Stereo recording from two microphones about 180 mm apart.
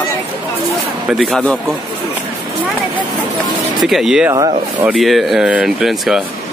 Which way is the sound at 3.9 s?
Centre (ahead or behind).